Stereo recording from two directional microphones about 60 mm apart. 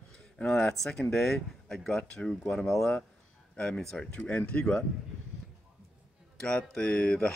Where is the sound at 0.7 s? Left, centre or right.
Centre.